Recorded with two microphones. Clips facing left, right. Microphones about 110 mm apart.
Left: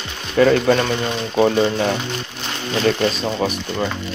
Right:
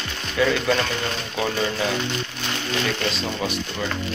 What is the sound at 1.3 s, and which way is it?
Speech, 35° left (ahead or behind).